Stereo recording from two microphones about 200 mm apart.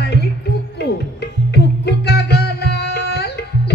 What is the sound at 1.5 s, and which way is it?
Music, 55° left (ahead or behind).